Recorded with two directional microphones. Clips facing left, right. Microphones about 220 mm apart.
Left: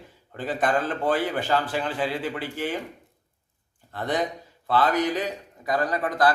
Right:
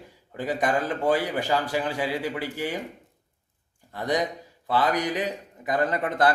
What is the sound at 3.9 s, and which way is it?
A man's voice, 15° right (ahead or behind).